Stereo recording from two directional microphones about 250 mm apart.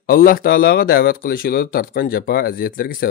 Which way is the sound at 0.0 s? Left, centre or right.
Left.